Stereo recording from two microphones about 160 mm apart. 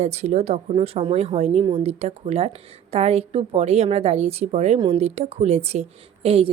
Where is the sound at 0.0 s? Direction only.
45° right (ahead or behind).